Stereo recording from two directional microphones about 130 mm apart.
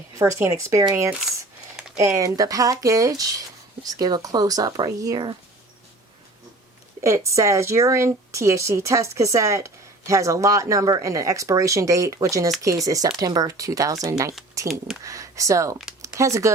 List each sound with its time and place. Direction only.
0.2 s a woman's voice: 20° right (ahead or behind)
2.0 s a woman's voice: 25° right (ahead or behind)
7.3 s a woman's voice: 25° right (ahead or behind)
14.6 s a sound: 25° right (ahead or behind)
15.0 s a woman's voice: 25° right (ahead or behind)
16.0 s a sound: 25° right (ahead or behind)